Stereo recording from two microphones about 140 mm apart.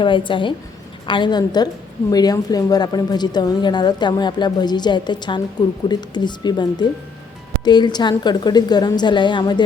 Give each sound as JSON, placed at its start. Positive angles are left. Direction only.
{"t": 0.0, "sound": "a woman's voice", "side_deg": 35}